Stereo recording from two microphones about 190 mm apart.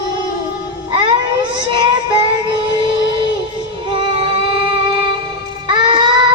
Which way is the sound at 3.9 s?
30° right (ahead or behind).